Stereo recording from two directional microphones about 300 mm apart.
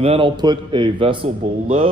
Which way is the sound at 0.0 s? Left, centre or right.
Centre.